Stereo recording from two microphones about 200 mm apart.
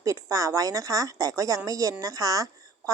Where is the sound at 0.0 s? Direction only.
15° right (ahead or behind).